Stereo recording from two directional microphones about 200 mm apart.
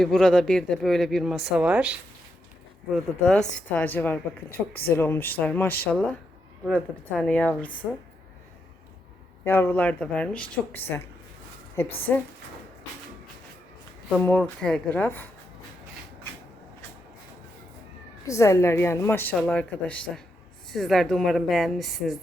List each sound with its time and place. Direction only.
0.0 s a woman's voice: 5° left (ahead or behind)
9.4 s a woman's voice: 10° left (ahead or behind)
12.1 s a woman's voice: 10° left (ahead or behind)
14.2 s a woman's voice: 5° left (ahead or behind)
18.3 s a woman's voice: 15° left (ahead or behind); by 22.2 s centre (ahead or behind)